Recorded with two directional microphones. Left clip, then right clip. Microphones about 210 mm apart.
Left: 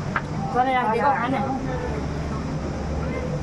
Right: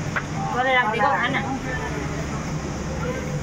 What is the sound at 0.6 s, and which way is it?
Speech, 55° left (ahead or behind).